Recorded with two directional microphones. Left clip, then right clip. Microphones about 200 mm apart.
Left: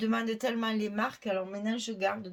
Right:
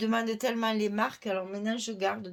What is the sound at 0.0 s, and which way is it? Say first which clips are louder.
Speech: right 2 dB; 35° right (ahead or behind).